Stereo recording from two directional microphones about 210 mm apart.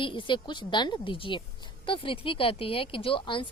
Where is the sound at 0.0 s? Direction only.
25° left (ahead or behind).